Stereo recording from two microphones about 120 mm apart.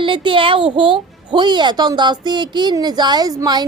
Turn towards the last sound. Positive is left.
turn(degrees=-35)  # may be behind; listen again after turning